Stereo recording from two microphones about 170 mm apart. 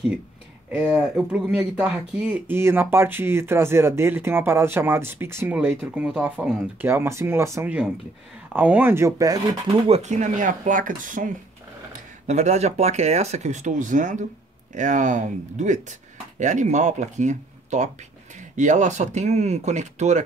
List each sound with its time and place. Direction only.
0.7 s speech: 5° right (ahead or behind)
9.8 s speech: 40° right (ahead or behind)